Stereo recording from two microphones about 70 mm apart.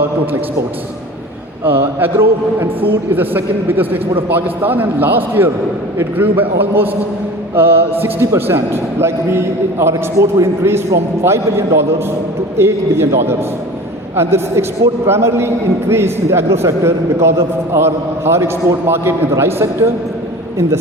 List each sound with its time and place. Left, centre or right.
1.6 s a man's voice: right